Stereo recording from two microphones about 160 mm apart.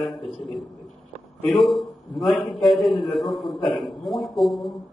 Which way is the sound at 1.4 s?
Centre (ahead or behind).